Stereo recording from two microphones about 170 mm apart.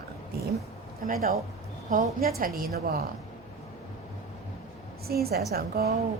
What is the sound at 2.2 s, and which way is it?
Speech, 60° right (ahead or behind).